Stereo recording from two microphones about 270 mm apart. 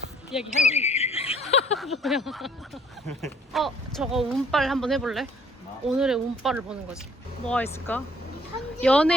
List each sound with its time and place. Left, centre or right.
0.3 s speech: centre
0.7 s bird: left
1.8 s speech: centre